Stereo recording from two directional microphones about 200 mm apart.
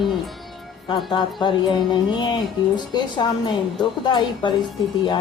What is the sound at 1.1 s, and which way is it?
A woman's voice, 25° left (ahead or behind).